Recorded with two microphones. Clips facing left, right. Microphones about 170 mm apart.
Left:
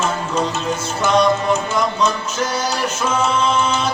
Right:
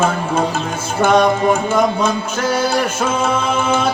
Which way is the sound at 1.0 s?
55° right (ahead or behind).